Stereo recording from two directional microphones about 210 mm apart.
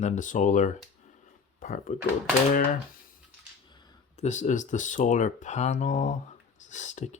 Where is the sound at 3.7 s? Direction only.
20° left (ahead or behind).